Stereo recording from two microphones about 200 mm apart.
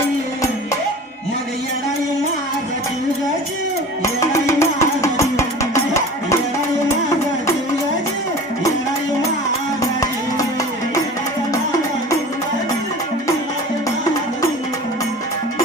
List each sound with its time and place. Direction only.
4.0 s music: 15° left (ahead or behind)
9.8 s music: 15° left (ahead or behind)